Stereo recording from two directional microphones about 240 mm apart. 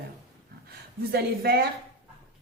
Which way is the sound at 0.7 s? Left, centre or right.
Right.